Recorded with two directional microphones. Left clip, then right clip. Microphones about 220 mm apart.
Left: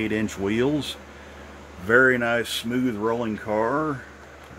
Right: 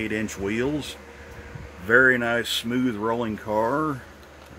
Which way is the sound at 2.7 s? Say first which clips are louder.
Left 3 dB; 25° right (ahead or behind).